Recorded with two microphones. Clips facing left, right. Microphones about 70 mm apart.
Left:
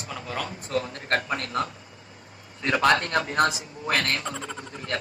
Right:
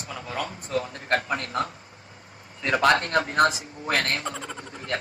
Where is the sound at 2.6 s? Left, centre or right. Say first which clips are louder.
Right 1 dB; right.